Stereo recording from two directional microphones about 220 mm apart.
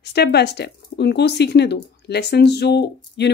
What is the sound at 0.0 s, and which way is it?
A woman's voice, 45° left (ahead or behind).